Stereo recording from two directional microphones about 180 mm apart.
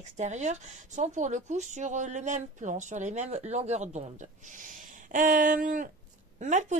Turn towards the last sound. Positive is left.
turn(degrees=-40)  # may be behind; listen again after turning